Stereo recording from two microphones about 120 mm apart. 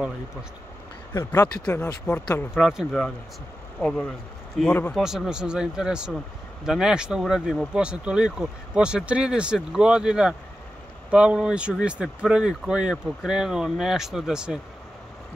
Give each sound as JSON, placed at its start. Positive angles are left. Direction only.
{"t": 1.4, "sound": "speech", "side_deg": 35}
{"t": 1.8, "sound": "speech", "side_deg": 10}
{"t": 2.5, "sound": "speech", "side_deg": -5}
{"t": 4.9, "sound": "speech", "side_deg": -5}